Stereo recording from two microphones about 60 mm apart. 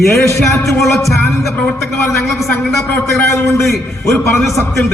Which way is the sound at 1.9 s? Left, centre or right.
Left.